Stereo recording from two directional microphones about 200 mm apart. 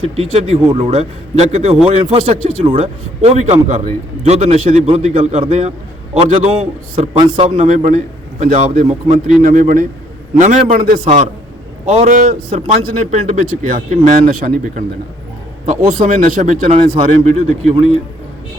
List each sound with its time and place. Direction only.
0.2 s a man's voice: 30° right (ahead or behind)
15.9 s a man's voice: 40° right (ahead or behind)